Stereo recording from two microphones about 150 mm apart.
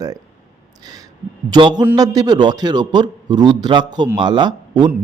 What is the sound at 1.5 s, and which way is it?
A man's voice, 30° right (ahead or behind).